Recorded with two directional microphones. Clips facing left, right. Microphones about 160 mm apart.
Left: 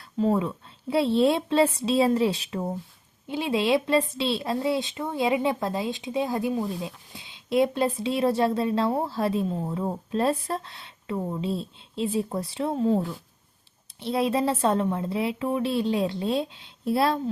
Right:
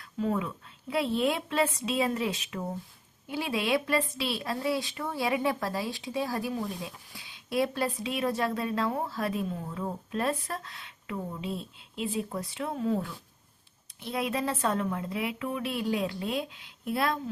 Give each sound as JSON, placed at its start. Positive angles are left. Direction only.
{"t": 0.0, "sound": "a woman's voice", "side_deg": 30}